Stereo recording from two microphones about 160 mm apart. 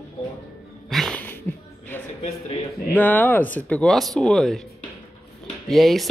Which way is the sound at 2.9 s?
10° left (ahead or behind).